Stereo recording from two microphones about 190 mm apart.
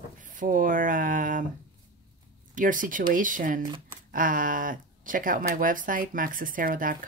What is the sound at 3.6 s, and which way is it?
Speech, 20° right (ahead or behind).